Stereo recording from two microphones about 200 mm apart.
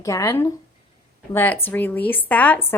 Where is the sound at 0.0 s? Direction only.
15° left (ahead or behind).